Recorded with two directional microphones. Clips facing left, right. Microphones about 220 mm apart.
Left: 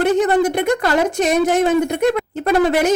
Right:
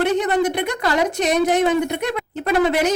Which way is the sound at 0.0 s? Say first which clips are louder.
Left 3 dB; 45° left (ahead or behind).